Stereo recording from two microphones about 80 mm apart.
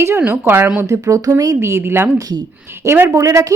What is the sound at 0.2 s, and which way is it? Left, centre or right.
Speech, right.